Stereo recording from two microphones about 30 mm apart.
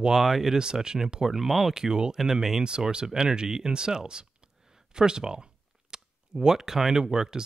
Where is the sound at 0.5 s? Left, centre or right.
Right.